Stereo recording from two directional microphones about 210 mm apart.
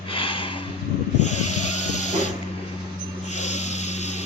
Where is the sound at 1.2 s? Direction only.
90° left.